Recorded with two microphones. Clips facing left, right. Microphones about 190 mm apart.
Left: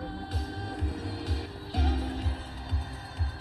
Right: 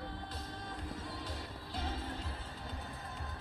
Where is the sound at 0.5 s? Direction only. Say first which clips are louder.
Left 8 dB; 90° left.